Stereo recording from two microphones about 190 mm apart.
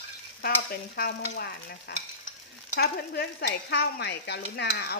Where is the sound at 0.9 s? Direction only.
55° left (ahead or behind).